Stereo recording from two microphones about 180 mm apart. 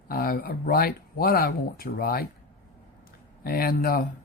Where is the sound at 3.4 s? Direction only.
55° left (ahead or behind).